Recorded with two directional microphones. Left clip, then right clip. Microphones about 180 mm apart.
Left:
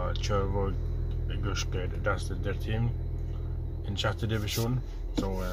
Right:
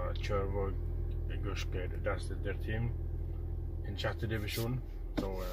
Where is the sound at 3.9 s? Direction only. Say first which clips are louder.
Left 6 dB; 15° left (ahead or behind).